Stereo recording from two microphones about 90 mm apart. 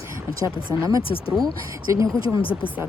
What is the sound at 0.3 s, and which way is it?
Speech, 40° right (ahead or behind).